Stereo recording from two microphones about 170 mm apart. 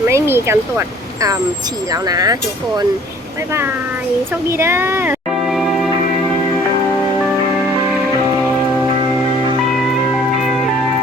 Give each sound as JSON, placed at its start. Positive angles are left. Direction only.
{"t": 0.1, "sound": "speech", "side_deg": -15}
{"t": 4.4, "sound": "speech", "side_deg": -15}
{"t": 5.5, "sound": "music", "side_deg": 0}